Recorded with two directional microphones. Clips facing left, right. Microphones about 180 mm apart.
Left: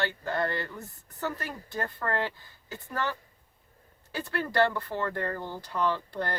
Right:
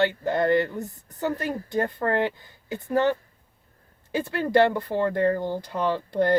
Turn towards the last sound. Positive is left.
turn(degrees=-15)  # may be behind; listen again after turning